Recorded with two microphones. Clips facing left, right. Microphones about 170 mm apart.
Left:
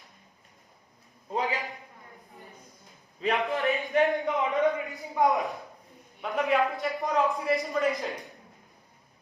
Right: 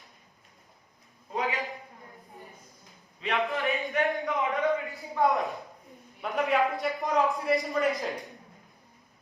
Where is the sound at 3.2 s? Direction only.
40° left (ahead or behind).